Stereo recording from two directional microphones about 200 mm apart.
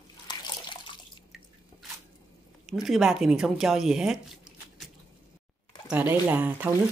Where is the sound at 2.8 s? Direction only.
Centre (ahead or behind).